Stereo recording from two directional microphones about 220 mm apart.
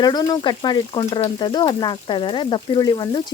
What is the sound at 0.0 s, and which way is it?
Speech, 20° left (ahead or behind).